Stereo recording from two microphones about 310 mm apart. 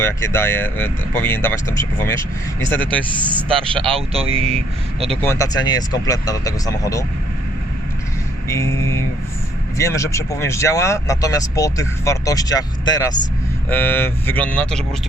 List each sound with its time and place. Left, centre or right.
0.0 s speech: centre
3.9 s speech: centre
5.1 s speech: centre
8.4 s speech: centre